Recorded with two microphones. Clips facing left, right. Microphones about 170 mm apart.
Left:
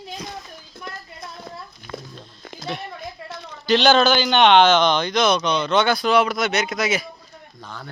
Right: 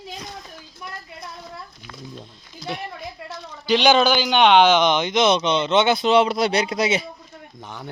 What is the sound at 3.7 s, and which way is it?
Speech, 15° right (ahead or behind).